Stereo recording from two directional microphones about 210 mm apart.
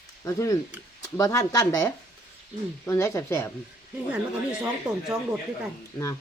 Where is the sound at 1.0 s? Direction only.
15° left (ahead or behind).